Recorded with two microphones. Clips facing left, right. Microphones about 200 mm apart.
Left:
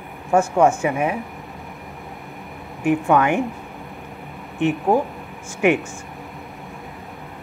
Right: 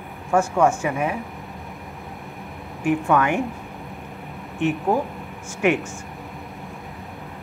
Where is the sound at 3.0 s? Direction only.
20° left (ahead or behind).